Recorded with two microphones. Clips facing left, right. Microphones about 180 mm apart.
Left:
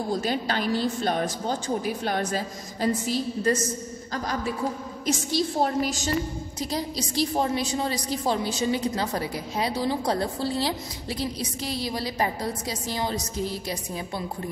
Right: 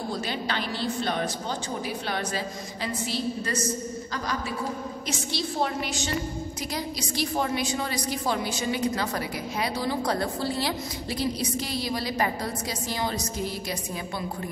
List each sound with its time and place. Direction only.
0.1 s a woman's voice: 45° left (ahead or behind); by 13.2 s 30° left (ahead or behind)